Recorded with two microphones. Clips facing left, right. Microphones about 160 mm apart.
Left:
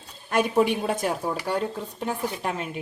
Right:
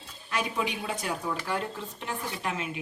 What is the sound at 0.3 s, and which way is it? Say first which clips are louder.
A woman's voice: left 9 dB; 50° left (ahead or behind).